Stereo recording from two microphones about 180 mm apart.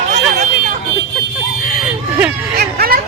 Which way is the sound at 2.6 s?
55° right (ahead or behind).